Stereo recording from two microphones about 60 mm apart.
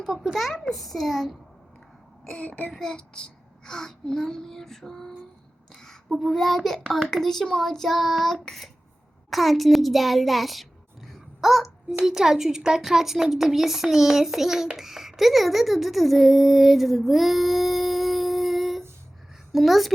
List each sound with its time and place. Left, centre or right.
0.3 s speech: centre
2.2 s speech: centre
2.7 s child singing: centre
5.7 s a child's voice: centre